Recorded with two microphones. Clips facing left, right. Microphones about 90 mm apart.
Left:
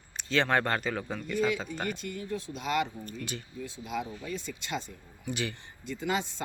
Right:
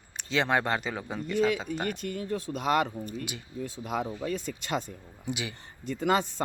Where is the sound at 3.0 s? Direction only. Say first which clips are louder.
Right 2 dB; 15° right (ahead or behind).